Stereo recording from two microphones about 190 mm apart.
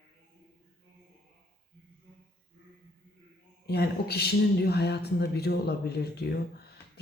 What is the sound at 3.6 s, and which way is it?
Speech, 55° left (ahead or behind).